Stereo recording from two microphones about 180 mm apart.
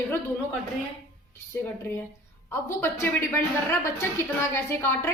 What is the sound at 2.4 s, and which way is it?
A woman's voice, 15° left (ahead or behind).